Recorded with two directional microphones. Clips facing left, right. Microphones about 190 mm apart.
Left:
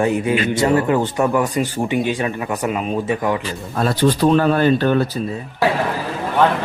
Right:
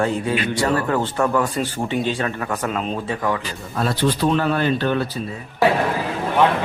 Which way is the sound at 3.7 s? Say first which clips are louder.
Left 4 dB; 45° left (ahead or behind).